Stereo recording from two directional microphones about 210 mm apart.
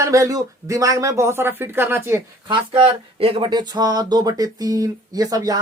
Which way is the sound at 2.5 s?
25° right (ahead or behind).